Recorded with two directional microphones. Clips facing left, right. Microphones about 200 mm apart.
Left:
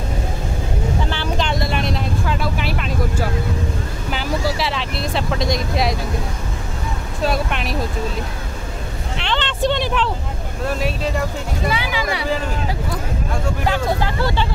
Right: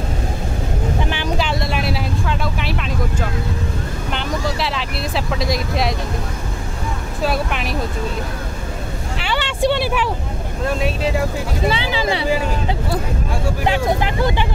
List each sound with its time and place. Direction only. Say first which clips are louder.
1.0 s vehicle: right 1 dB; 15° right (ahead or behind)
1.5 s speech: even; centre (ahead or behind)
7.2 s speech: even; centre (ahead or behind)
9.2 s a sound: right 1 dB; 10° right (ahead or behind)
10.7 s speech: right 2 dB; centre (ahead or behind)
11.7 s speech: right 2 dB; 25° right (ahead or behind)
13.7 s speech: right 2 dB; 20° right (ahead or behind)